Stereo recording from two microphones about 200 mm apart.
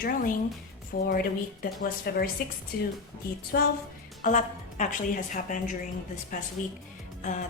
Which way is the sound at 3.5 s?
45° left (ahead or behind).